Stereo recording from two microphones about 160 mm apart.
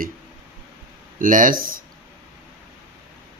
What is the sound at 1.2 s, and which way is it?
Speech, 55° right (ahead or behind).